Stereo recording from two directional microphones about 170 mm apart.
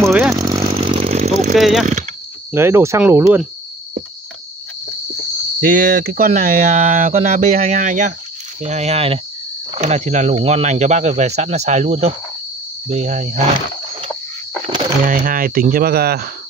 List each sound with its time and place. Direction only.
0.1 s chainsaw: 5° right (ahead or behind)
0.4 s a sound: 20° right (ahead or behind)
0.7 s chainsaw: 35° right (ahead or behind)
1.6 s speech: centre (ahead or behind)
2.5 s speech: 15° right (ahead or behind)
5.6 s speech: 55° right (ahead or behind)
15.0 s speech: 55° right (ahead or behind)